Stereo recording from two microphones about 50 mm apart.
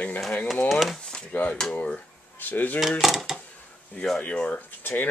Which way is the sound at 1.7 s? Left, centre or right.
Left.